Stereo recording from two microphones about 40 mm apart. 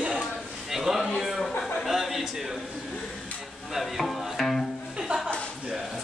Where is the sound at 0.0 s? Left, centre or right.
Right.